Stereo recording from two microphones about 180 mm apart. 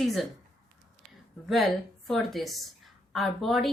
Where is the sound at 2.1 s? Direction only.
Centre (ahead or behind).